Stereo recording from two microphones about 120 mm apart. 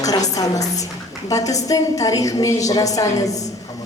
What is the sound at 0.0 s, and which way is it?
A woman's voice, 30° left (ahead or behind).